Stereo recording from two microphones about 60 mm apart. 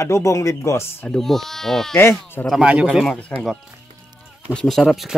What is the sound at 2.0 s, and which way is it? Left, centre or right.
Speech, left.